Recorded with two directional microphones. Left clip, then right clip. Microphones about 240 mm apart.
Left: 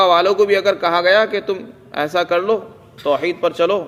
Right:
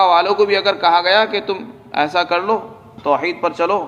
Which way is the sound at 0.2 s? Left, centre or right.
Left.